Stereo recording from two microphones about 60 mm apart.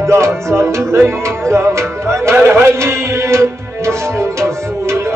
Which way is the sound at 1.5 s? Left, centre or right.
Right.